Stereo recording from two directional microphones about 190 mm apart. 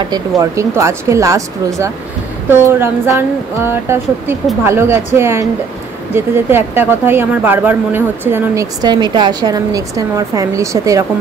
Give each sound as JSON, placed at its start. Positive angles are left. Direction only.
{"t": 0.1, "sound": "speech", "side_deg": -15}